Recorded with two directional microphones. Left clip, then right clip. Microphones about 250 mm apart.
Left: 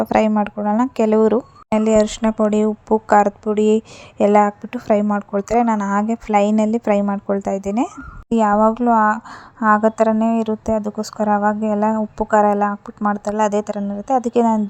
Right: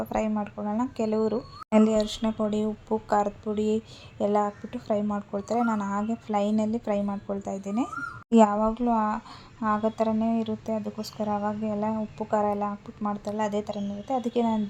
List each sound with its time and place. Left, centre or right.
0.0 s a woman's voice: left